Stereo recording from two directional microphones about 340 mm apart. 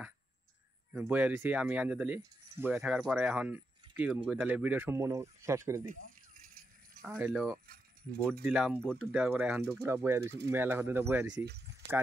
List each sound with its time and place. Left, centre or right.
0.9 s speech: centre
7.1 s speech: centre
10.2 s speech: right
10.5 s speech: centre
11.3 s speech: right